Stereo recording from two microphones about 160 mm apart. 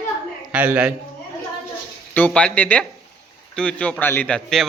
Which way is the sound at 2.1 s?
10° left (ahead or behind).